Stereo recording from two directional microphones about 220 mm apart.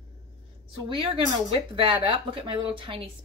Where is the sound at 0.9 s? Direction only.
25° right (ahead or behind).